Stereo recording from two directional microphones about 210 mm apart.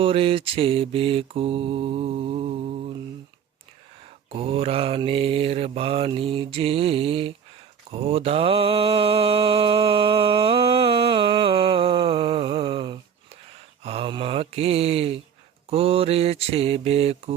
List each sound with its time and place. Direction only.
0.0 s mantra: 25° right (ahead or behind)
4.4 s mantra: 25° right (ahead or behind)